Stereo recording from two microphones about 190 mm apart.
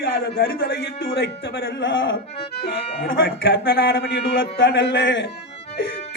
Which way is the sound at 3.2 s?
55° left (ahead or behind).